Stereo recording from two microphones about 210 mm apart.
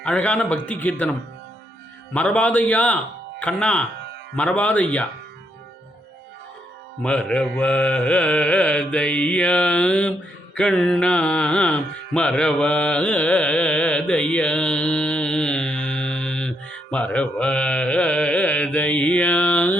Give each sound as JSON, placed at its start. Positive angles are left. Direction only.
{"t": 0.0, "sound": "a man's voice", "side_deg": 5}
{"t": 2.1, "sound": "a man's voice", "side_deg": 5}
{"t": 3.4, "sound": "mantra", "side_deg": 5}
{"t": 4.4, "sound": "a man's voice", "side_deg": 5}
{"t": 7.0, "sound": "mantra", "side_deg": 5}